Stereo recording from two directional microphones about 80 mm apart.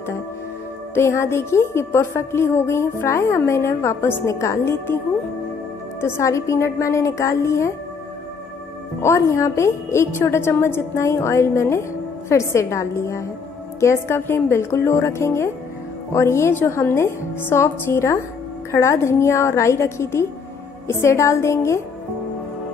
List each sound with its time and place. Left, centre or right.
0.9 s a woman's voice: left
5.9 s a woman's voice: left
9.0 s a woman's voice: left